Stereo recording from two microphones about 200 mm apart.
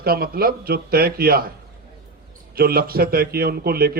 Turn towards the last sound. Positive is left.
turn(degrees=-50)  # may be behind; listen again after turning